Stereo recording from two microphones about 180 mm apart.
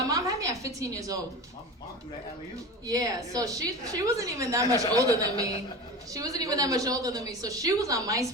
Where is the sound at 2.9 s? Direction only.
20° right (ahead or behind).